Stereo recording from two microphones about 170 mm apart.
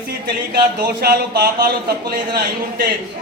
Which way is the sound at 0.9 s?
65° right (ahead or behind).